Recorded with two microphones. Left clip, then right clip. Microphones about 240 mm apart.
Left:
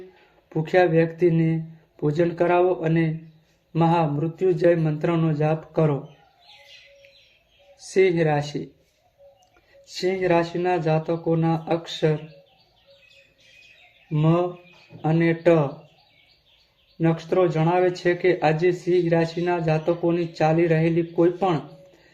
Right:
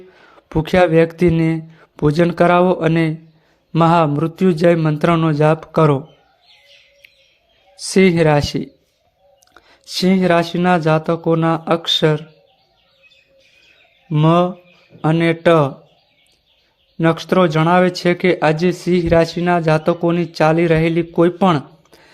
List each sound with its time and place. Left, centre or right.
0.4 s speech: right
7.9 s speech: right
14.1 s speech: right
17.0 s speech: right